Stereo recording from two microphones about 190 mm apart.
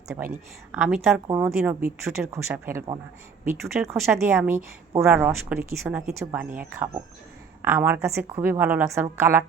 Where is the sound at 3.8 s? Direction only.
Centre (ahead or behind).